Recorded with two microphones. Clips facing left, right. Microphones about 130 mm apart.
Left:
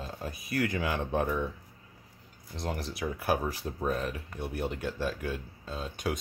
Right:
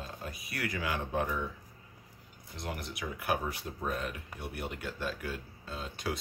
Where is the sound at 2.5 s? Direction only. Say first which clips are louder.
Left 5 dB; 30° left (ahead or behind).